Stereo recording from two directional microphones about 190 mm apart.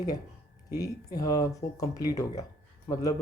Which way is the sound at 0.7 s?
20° left (ahead or behind).